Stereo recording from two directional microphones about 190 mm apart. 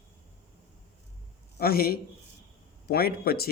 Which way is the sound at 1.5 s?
55° left (ahead or behind).